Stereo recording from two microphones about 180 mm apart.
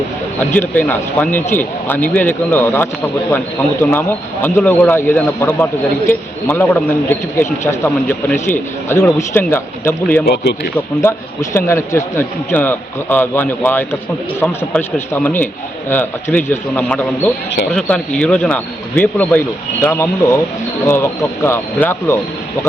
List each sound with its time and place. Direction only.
0.3 s speech: 10° left (ahead or behind)
10.2 s speech: 65° left (ahead or behind)
11.0 s speech: 15° left (ahead or behind)